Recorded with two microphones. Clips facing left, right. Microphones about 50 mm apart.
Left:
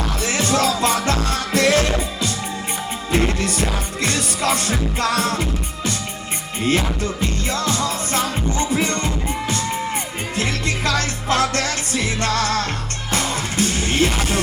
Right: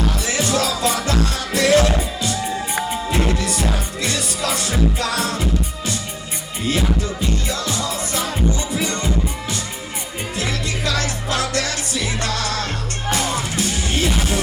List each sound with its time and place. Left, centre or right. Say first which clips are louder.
0.2 s music: left 5 dB; left
3.1 s music: left 5 dB; left